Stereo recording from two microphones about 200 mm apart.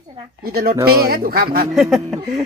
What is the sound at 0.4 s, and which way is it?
Speech, 50° right (ahead or behind).